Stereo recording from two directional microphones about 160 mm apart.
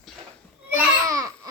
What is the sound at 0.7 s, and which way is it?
Babbling, 20° right (ahead or behind).